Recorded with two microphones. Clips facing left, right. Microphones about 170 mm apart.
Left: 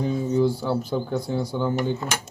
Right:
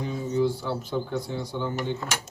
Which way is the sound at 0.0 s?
35° left (ahead or behind).